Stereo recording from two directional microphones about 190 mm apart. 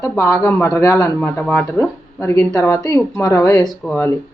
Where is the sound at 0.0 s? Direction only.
15° left (ahead or behind).